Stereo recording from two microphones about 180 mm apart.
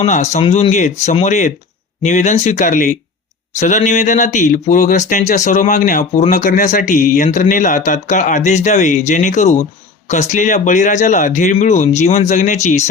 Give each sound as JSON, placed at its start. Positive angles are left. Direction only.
{"t": 0.0, "sound": "speech", "side_deg": 40}